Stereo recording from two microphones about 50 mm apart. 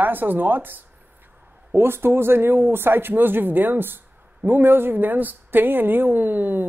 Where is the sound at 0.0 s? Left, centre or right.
Right.